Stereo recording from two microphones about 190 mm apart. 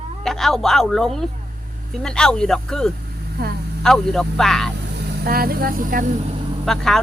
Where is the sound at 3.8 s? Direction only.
5° left (ahead or behind).